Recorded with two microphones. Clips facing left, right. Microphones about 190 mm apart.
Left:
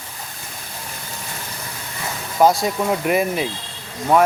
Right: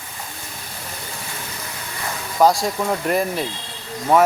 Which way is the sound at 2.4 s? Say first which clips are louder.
Left 1 dB; centre (ahead or behind).